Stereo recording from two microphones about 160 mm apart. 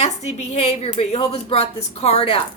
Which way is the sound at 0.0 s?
45° left (ahead or behind).